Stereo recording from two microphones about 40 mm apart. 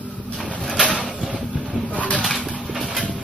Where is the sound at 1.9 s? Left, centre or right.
Left.